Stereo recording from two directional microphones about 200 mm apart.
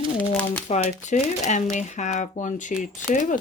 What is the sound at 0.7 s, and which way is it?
Speech, 35° left (ahead or behind).